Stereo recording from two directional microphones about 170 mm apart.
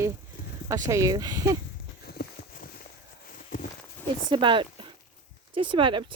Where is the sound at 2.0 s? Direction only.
60° left (ahead or behind).